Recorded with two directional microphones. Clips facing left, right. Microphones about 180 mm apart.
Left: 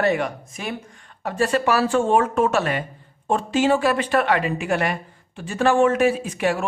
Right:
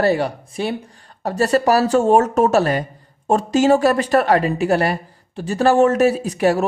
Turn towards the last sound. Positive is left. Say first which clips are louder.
# right 6 dB
turn(degrees=-40)  # may be behind; listen again after turning